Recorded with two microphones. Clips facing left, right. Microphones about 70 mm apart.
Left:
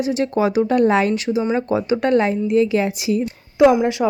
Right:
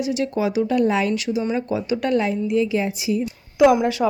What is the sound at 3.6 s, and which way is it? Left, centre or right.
Speech, centre.